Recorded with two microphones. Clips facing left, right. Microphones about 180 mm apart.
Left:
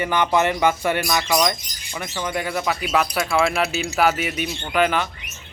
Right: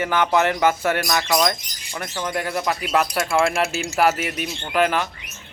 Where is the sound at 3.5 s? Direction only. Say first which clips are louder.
Even; 50° right (ahead or behind).